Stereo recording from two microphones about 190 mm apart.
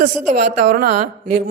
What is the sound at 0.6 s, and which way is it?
Speech, 55° right (ahead or behind).